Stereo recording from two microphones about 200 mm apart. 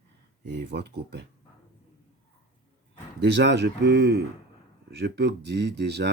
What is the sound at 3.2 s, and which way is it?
Speech, 60° right (ahead or behind).